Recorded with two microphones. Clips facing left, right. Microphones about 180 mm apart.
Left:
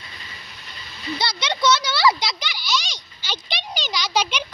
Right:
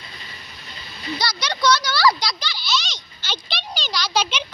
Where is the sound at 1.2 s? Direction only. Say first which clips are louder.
Even; 25° left (ahead or behind).